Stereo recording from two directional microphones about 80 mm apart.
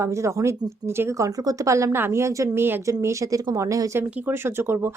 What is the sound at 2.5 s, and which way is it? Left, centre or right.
Speech, right.